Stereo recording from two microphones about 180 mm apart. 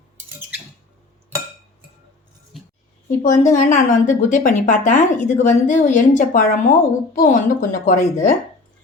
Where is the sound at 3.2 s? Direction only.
45° left (ahead or behind).